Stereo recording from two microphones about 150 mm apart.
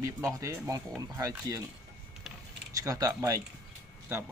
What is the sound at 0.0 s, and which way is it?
Speech, 20° right (ahead or behind).